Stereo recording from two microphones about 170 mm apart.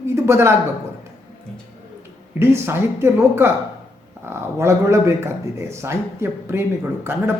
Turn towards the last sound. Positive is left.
turn(degrees=-15)  # may be behind; listen again after turning